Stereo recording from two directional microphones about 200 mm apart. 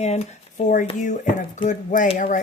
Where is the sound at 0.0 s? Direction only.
35° left (ahead or behind).